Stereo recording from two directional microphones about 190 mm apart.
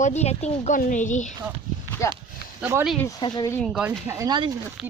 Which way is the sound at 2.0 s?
15° left (ahead or behind).